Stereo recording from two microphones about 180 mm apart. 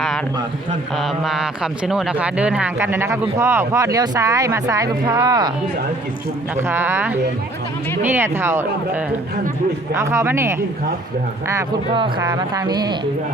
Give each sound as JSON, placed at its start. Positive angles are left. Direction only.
{"t": 0.9, "sound": "speech", "side_deg": 0}
{"t": 6.6, "sound": "speech", "side_deg": -15}
{"t": 9.9, "sound": "speech", "side_deg": -15}
{"t": 11.9, "sound": "speech", "side_deg": -25}